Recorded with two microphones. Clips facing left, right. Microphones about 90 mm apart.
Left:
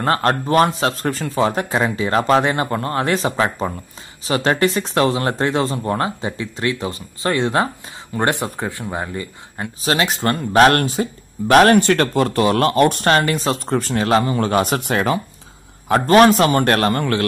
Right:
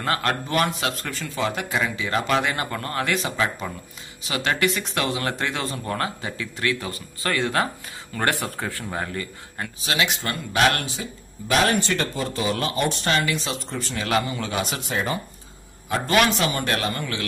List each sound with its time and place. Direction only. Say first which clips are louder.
0.0 s speech: left 7 dB; 35° left (ahead or behind); by 9.7 s 20° left (ahead or behind)
9.8 s speech: left 6 dB; 40° left (ahead or behind); by 15.1 s 75° left (ahead or behind)
16.1 s speech: left 9 dB; 40° left (ahead or behind)